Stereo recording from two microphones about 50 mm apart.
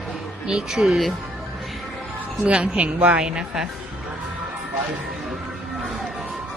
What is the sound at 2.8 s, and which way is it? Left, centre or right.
Speech, right.